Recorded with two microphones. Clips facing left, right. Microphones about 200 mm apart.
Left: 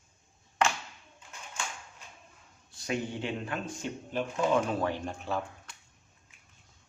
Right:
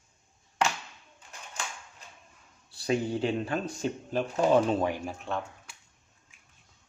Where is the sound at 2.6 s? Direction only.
35° right (ahead or behind).